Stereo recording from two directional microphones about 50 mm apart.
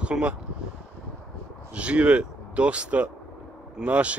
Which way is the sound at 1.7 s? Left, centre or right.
Right.